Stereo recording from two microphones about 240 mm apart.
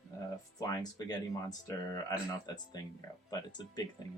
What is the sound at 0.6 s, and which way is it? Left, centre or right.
Speech, centre.